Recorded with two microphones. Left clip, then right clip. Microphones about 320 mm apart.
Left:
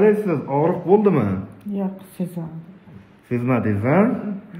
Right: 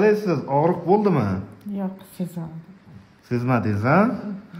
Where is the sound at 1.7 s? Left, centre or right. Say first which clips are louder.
Left 3 dB; centre.